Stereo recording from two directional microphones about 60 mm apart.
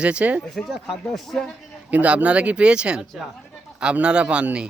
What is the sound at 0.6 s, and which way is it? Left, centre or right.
Speech, centre.